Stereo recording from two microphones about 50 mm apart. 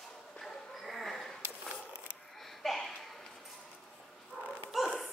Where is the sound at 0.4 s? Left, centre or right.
Centre.